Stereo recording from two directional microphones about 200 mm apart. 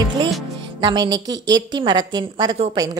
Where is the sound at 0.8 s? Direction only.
20° right (ahead or behind).